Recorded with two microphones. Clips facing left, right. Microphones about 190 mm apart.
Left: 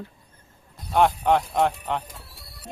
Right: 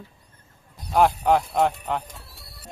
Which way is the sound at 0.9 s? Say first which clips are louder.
Right 1 dB; centre (ahead or behind).